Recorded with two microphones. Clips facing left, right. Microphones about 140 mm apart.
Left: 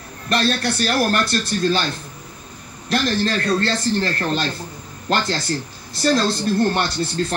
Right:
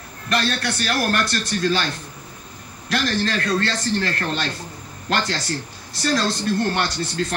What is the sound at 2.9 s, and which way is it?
A man's voice, 30° left (ahead or behind).